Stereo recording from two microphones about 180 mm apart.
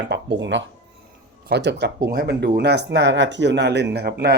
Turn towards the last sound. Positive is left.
turn(degrees=-65)  # may be behind; listen again after turning